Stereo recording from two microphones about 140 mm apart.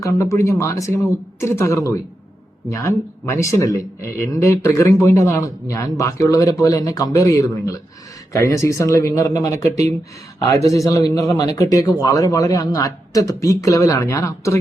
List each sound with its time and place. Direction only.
0.0 s speech: 20° left (ahead or behind)
10.7 s speech: 25° left (ahead or behind)